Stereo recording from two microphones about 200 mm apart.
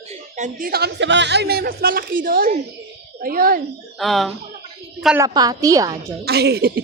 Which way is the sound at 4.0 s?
Centre (ahead or behind).